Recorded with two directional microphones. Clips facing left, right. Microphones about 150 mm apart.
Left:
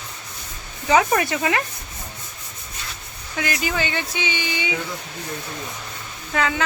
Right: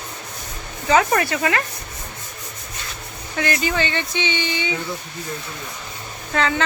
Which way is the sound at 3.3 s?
5° left (ahead or behind).